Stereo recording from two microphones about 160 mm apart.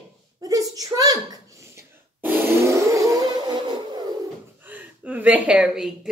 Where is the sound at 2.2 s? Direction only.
15° right (ahead or behind).